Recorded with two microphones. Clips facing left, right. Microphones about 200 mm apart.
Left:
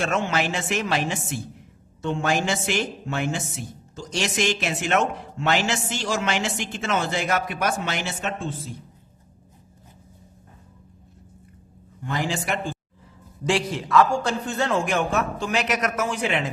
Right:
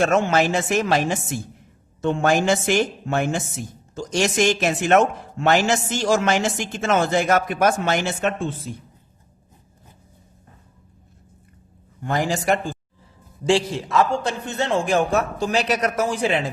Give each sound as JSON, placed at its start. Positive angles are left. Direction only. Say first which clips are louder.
{"t": 0.0, "sound": "a woman's voice", "louder": "right 6 dB", "side_deg": -45}
{"t": 12.0, "sound": "a woman's voice", "louder": "right 6 dB", "side_deg": -45}
{"t": 13.4, "sound": "a man's voice", "louder": "right 4 dB", "side_deg": -30}